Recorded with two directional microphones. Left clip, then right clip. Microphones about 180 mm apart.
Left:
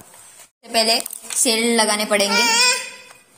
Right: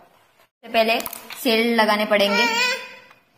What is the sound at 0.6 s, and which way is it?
Speech, 5° left (ahead or behind).